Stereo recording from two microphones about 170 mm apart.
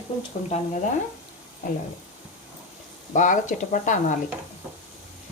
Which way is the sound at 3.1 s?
45° left (ahead or behind).